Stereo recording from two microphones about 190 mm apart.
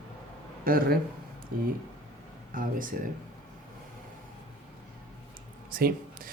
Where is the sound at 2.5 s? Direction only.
45° right (ahead or behind).